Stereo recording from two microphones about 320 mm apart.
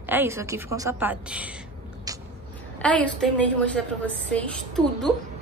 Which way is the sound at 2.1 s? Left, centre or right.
Centre.